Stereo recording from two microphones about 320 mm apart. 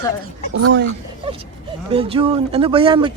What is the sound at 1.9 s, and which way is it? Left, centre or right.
Speech, centre.